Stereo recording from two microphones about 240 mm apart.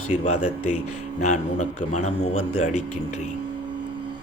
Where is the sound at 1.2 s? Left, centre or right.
Left.